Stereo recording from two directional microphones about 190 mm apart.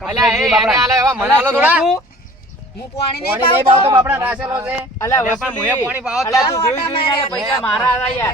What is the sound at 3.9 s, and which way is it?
Speech, 15° right (ahead or behind).